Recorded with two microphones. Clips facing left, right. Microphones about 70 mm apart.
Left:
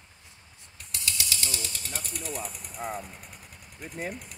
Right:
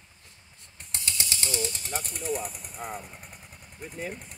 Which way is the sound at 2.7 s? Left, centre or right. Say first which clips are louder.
Left 3 dB; centre.